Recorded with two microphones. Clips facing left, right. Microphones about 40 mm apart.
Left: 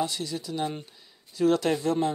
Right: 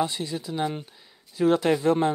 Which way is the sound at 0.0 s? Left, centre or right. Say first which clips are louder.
Right 2 dB; right.